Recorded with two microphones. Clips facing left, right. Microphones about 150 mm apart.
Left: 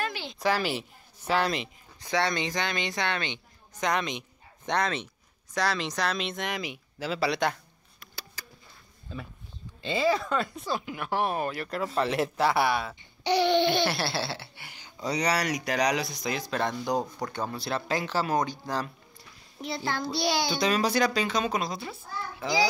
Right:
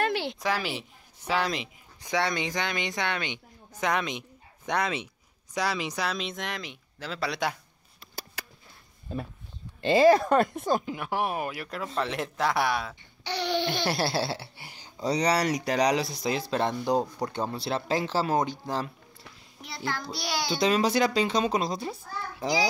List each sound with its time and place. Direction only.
0.0 s a sound: 70° right (ahead or behind)
0.4 s speech: centre (ahead or behind)
2.0 s speech: 10° right (ahead or behind)
8.4 s a sound: 60° right (ahead or behind)
9.8 s speech: 65° right (ahead or behind)
10.1 s speech: 45° right (ahead or behind)
11.1 s speech: 10° right (ahead or behind)
13.8 s speech: 40° right (ahead or behind); by 18.9 s 25° right (ahead or behind)
19.6 s a child's voice: 25° left (ahead or behind)
20.5 s speech: 25° right (ahead or behind)